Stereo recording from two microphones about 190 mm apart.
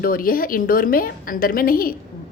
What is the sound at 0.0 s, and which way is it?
A woman's voice, 50° left (ahead or behind).